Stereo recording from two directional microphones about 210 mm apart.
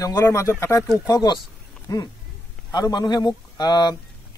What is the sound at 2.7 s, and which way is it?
A man's voice, 20° left (ahead or behind).